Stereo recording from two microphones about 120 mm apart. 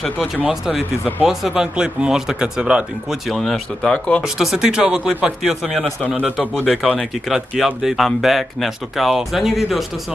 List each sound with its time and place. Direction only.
0.4 s speech: 5° right (ahead or behind)
4.2 s speech: 5° right (ahead or behind)